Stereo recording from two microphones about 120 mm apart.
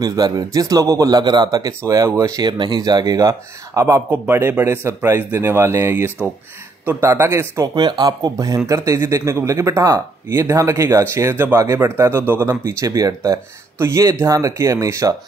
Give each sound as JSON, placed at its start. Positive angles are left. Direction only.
{"t": 0.0, "sound": "speech", "side_deg": -30}
{"t": 7.7, "sound": "speech", "side_deg": -35}